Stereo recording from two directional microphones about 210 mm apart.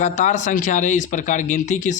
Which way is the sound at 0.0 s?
35° left (ahead or behind).